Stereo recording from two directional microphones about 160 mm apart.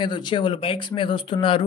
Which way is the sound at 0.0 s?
30° left (ahead or behind).